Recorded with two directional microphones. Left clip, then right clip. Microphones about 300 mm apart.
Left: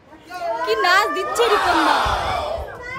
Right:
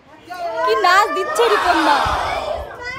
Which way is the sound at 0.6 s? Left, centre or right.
Centre.